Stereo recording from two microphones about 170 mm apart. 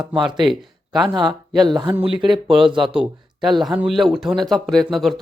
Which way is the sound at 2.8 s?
5° right (ahead or behind).